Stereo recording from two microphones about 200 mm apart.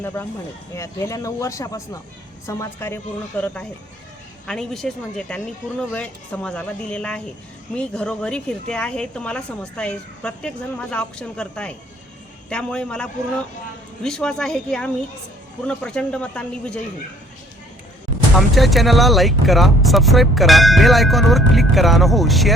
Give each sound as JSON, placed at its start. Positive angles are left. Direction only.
{"t": 0.0, "sound": "speech", "side_deg": 10}
{"t": 18.3, "sound": "speech", "side_deg": 0}